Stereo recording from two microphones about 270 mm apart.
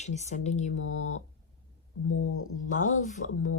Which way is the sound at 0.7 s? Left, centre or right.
Left.